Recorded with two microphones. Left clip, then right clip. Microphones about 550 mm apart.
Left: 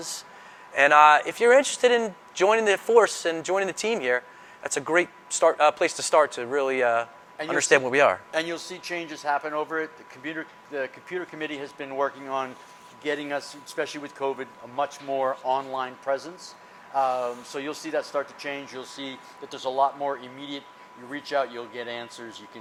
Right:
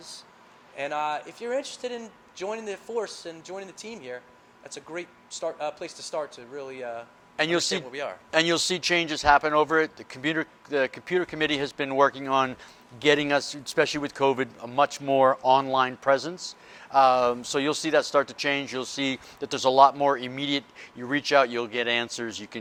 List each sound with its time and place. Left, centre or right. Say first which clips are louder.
0.8 s speech: left 13 dB; left
8.3 s speech: right 6 dB; right